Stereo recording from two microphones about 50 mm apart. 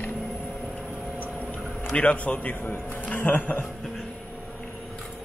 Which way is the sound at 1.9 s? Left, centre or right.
Left.